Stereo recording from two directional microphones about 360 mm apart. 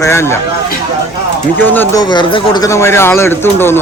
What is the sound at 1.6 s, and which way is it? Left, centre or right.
Speech, centre.